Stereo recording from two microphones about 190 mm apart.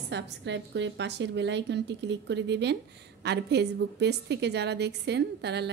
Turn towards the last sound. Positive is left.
turn(degrees=-60)  # may be behind; listen again after turning